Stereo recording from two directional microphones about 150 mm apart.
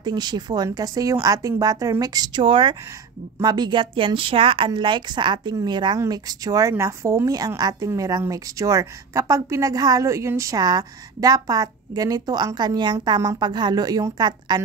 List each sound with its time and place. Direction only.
0.0 s a woman's voice: 30° right (ahead or behind)